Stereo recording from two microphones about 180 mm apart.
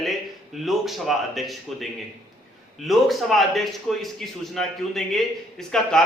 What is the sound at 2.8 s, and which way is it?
A man's voice, centre (ahead or behind).